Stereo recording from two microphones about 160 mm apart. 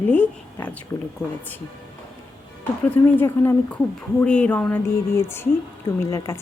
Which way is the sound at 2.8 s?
10° left (ahead or behind).